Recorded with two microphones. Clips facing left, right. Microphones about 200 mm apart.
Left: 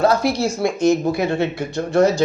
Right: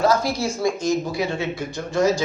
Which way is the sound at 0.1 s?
65° left (ahead or behind).